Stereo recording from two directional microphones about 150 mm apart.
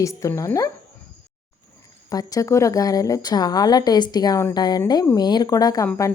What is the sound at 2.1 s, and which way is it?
Speech, 25° left (ahead or behind).